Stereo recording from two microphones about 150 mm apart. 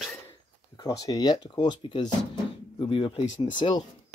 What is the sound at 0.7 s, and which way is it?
Speech, 25° left (ahead or behind).